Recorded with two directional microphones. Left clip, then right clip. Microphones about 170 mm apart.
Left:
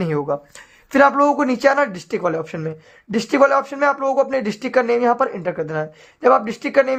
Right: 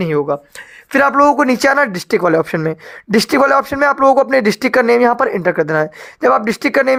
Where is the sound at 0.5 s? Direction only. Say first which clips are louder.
Even; 45° right (ahead or behind).